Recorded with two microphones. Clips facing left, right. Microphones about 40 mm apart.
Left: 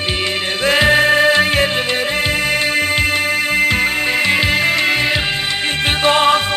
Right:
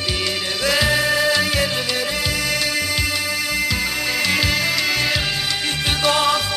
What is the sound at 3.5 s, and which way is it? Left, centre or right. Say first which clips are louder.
Music: left 8 dB; left.